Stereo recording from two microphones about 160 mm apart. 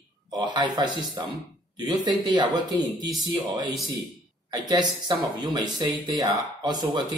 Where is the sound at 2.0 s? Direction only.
25° right (ahead or behind).